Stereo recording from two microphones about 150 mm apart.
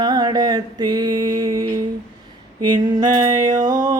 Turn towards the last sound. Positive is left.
turn(degrees=-25)  # may be behind; listen again after turning